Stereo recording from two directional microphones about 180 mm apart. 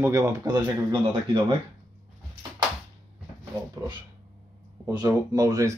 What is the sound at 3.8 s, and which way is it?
Speech, 20° right (ahead or behind).